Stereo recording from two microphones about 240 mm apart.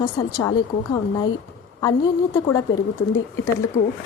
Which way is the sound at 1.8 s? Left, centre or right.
Centre.